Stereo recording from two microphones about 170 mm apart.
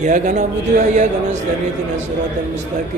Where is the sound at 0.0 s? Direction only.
45° right (ahead or behind).